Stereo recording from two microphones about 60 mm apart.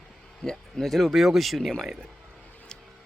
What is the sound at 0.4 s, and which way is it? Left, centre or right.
Speech, centre.